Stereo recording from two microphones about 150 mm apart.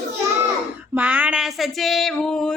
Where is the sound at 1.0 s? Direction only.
10° right (ahead or behind); by 2.5 s 5° left (ahead or behind).